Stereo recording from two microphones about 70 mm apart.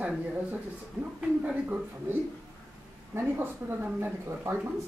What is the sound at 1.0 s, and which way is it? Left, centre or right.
Speech, centre.